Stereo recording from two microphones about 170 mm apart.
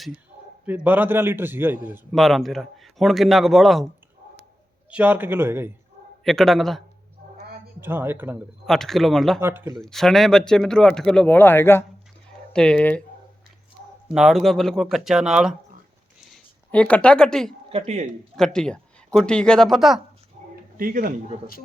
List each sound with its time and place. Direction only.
0.6 s a man's voice: 10° right (ahead or behind)
2.1 s speech: centre (ahead or behind)
4.9 s a man's voice: 10° right (ahead or behind)
6.2 s speech: centre (ahead or behind)
7.8 s a man's voice: 10° right (ahead or behind)
8.6 s speech: centre (ahead or behind)
9.4 s a man's voice: 15° right (ahead or behind)
9.7 s speech: centre (ahead or behind)
14.1 s speech: centre (ahead or behind)
16.3 s speech: 5° left (ahead or behind)
17.7 s speech: 40° right (ahead or behind)
18.3 s speech: 5° left (ahead or behind)
20.7 s speech: 55° right (ahead or behind)